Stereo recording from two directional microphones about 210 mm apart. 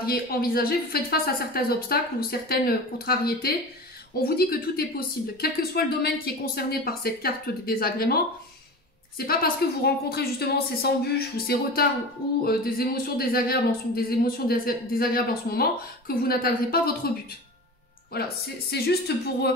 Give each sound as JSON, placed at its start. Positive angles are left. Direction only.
{"t": 0.0, "sound": "speech", "side_deg": 45}
{"t": 9.2, "sound": "speech", "side_deg": 45}
{"t": 18.7, "sound": "speech", "side_deg": 50}